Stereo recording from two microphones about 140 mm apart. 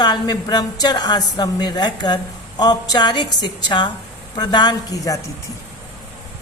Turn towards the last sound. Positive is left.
turn(degrees=25)  # may be behind; listen again after turning